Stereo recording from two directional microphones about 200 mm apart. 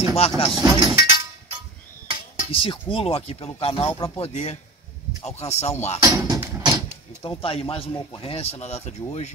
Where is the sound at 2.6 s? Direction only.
25° left (ahead or behind).